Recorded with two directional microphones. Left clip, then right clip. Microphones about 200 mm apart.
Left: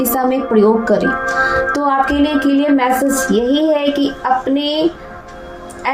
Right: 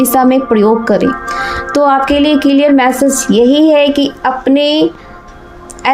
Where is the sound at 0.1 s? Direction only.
45° right (ahead or behind).